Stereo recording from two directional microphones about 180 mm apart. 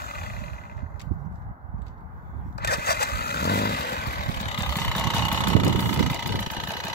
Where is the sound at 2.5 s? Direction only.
60° left (ahead or behind).